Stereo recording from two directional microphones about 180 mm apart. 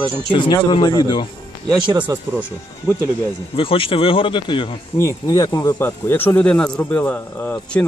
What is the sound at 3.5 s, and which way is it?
Speech, 30° left (ahead or behind).